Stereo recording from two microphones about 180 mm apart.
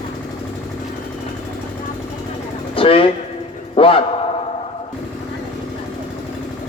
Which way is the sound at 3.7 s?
30° left (ahead or behind).